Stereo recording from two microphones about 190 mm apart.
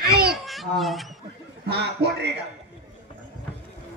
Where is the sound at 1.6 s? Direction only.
60° right (ahead or behind).